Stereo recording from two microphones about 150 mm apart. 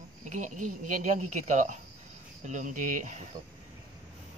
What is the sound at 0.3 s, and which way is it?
Speech, 55° right (ahead or behind).